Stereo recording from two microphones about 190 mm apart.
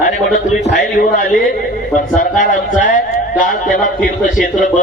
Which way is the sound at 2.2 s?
45° left (ahead or behind).